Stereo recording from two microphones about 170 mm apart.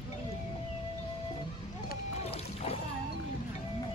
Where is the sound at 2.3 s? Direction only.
35° left (ahead or behind).